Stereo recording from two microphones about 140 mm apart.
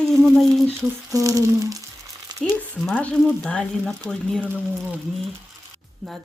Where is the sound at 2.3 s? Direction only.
30° right (ahead or behind).